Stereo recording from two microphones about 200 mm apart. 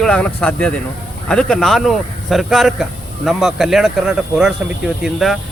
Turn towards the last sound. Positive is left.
turn(degrees=0)  # may be behind; listen again after turning